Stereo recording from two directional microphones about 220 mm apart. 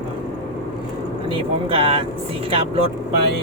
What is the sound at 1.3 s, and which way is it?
Speech, 25° right (ahead or behind).